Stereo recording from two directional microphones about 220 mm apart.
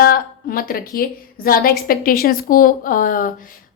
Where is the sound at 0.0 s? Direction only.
40° left (ahead or behind).